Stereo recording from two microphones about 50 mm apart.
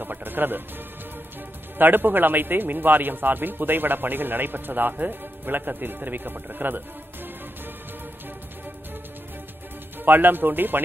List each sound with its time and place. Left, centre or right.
0.0 s speech: right
1.8 s a man's voice: right
10.0 s a man's voice: right